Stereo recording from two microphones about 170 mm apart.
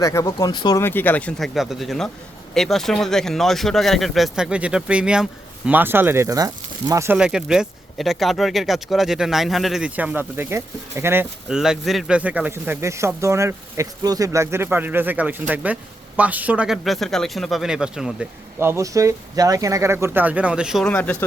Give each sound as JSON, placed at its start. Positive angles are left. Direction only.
{"t": 0.0, "sound": "speech", "side_deg": 20}
{"t": 0.8, "sound": "speech", "side_deg": 10}
{"t": 7.2, "sound": "speech", "side_deg": -5}
{"t": 18.6, "sound": "speech", "side_deg": -15}
{"t": 20.8, "sound": "speech", "side_deg": 10}